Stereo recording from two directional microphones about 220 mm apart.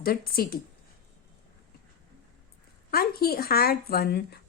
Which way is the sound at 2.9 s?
45° left (ahead or behind).